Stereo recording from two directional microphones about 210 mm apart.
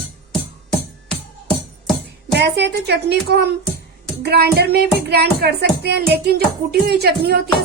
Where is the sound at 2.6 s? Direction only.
50° right (ahead or behind).